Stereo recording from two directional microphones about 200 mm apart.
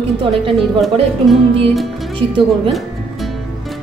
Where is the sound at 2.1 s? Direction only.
25° right (ahead or behind).